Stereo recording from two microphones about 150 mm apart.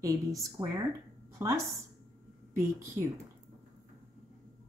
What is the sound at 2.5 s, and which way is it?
Speech, 20° right (ahead or behind).